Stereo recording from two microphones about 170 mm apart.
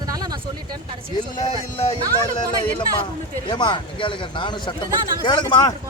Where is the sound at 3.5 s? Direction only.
25° left (ahead or behind).